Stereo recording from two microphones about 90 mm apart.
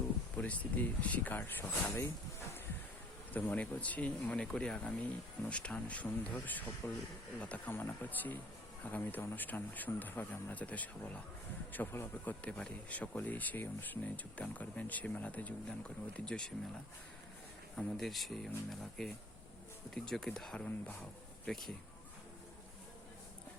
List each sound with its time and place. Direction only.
0.3 s speech: 15° left (ahead or behind)
3.3 s speech: 20° left (ahead or behind)
17.7 s speech: centre (ahead or behind)
20.7 s speech: 20° left (ahead or behind)